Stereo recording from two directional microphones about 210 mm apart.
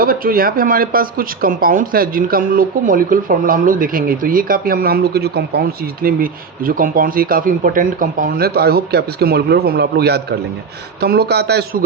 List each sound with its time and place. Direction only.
0.0 s speech: 45° right (ahead or behind)